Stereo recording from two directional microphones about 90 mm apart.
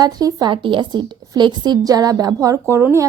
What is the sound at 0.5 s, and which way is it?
A woman's voice, 65° right (ahead or behind).